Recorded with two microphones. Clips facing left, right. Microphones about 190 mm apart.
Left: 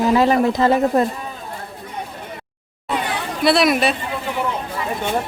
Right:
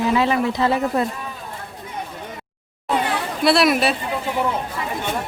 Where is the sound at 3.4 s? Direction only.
Centre (ahead or behind).